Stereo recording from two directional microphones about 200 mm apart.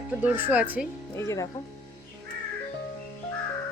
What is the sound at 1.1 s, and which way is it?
Speech, 15° left (ahead or behind).